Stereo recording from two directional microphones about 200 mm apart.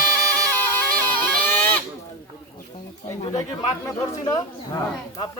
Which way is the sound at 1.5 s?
10° left (ahead or behind).